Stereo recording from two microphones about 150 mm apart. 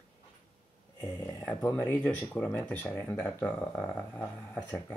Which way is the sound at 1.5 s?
10° left (ahead or behind).